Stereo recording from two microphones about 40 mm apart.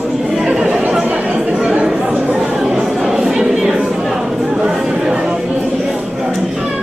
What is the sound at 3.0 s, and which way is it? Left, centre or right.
Chatter, centre.